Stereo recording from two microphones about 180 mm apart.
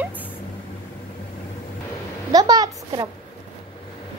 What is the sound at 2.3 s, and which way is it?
Speech, 20° right (ahead or behind).